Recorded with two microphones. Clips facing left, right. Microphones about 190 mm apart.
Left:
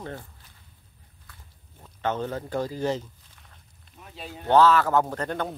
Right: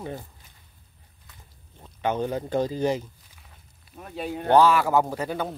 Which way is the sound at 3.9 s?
55° right (ahead or behind).